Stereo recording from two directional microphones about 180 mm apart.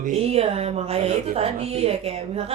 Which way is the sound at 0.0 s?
35° right (ahead or behind).